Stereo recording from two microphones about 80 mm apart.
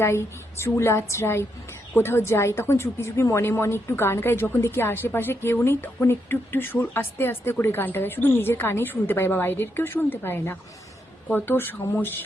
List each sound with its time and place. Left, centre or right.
0.0 s a woman's voice: left